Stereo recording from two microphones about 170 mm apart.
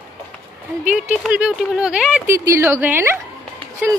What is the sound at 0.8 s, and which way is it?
Speech, 10° right (ahead or behind).